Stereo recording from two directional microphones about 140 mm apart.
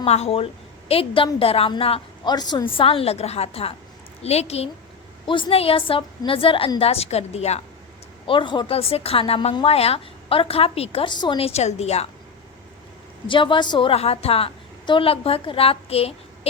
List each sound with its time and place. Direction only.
0.0 s a woman's voice: 45° left (ahead or behind)
5.2 s a woman's voice: 35° left (ahead or behind)
8.3 s a woman's voice: 35° left (ahead or behind); by 12.0 s 50° left (ahead or behind)
13.2 s a woman's voice: 35° left (ahead or behind)